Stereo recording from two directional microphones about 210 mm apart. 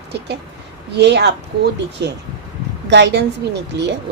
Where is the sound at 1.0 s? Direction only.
55° right (ahead or behind).